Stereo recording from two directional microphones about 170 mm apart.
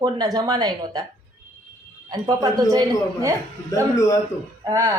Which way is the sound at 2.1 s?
20° right (ahead or behind).